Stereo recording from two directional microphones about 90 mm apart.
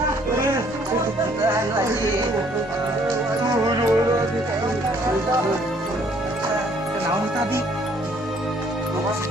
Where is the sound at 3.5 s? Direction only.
40° right (ahead or behind).